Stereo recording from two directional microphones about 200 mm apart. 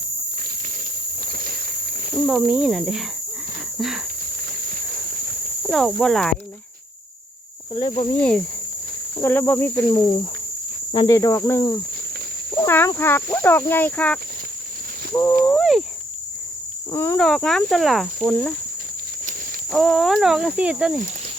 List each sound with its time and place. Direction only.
1.2 s a sound: 50° right (ahead or behind)
2.2 s speech: 5° right (ahead or behind)
5.6 s speech: centre (ahead or behind)
7.8 s speech: 30° left (ahead or behind)
8.1 s speech: 5° left (ahead or behind)
10.9 s speech: 20° left (ahead or behind)
15.5 s speech: centre (ahead or behind)
16.9 s speech: 10° left (ahead or behind)
19.7 s speech: centre (ahead or behind)